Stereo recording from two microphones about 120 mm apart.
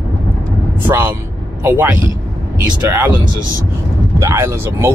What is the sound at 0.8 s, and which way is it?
Speech, 15° right (ahead or behind).